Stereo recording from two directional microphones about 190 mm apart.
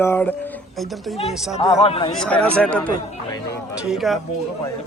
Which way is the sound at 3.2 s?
20° left (ahead or behind).